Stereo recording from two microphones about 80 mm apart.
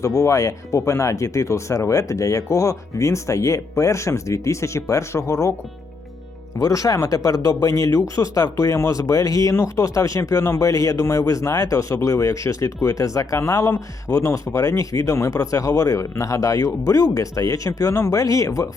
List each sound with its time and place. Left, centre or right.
0.0 s speech: left
6.6 s speech: left